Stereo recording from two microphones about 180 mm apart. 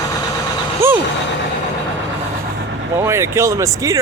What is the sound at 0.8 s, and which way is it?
Vehicle, 15° right (ahead or behind).